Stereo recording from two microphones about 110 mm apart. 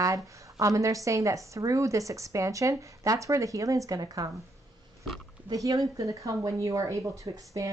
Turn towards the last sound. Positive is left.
turn(degrees=-30)  # may be behind; listen again after turning